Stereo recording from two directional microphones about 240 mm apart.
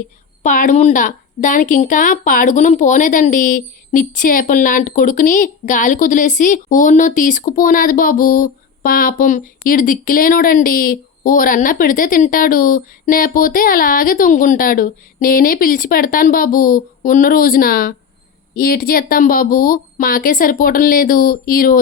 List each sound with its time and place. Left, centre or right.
0.4 s a woman's voice: left